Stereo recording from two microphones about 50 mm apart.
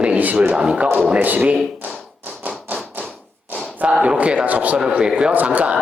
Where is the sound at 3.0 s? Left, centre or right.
Right.